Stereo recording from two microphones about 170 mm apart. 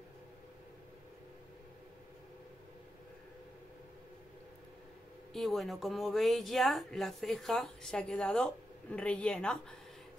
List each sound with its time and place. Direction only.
5.3 s a woman's voice: centre (ahead or behind)